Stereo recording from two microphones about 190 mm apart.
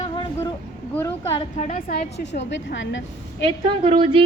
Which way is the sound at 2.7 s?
75° left (ahead or behind).